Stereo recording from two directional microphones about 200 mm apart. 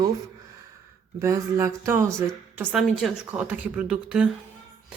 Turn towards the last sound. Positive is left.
turn(degrees=-5)  # may be behind; listen again after turning